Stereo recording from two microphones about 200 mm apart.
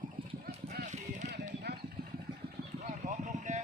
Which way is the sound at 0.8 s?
35° right (ahead or behind).